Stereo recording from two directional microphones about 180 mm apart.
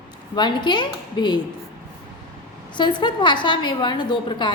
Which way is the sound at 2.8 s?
25° left (ahead or behind).